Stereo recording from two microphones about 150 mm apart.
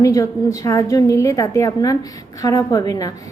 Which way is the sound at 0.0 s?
20° left (ahead or behind).